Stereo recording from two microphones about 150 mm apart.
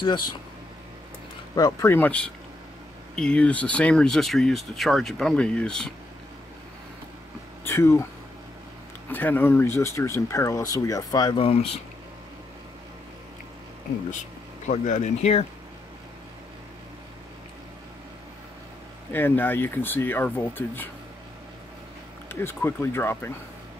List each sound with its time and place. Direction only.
0.0 s speech: 30° left (ahead or behind)
1.5 s speech: 25° left (ahead or behind); by 5.9 s 5° left (ahead or behind)
7.6 s speech: 15° left (ahead or behind)
9.1 s speech: 10° left (ahead or behind)
11.4 s speech: 40° left (ahead or behind)
14.7 s speech: 50° left (ahead or behind)
19.1 s speech: 15° left (ahead or behind)
22.3 s speech: 15° left (ahead or behind)